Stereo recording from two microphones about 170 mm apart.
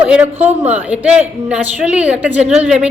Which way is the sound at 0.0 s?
10° right (ahead or behind).